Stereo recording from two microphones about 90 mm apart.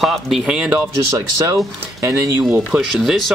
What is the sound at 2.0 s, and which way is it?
Speech, 35° right (ahead or behind).